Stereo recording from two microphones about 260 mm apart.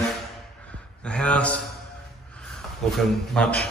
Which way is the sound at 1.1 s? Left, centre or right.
Centre.